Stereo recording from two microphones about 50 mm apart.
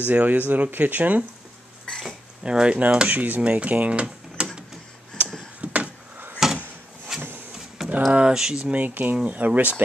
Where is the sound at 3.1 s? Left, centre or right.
Right.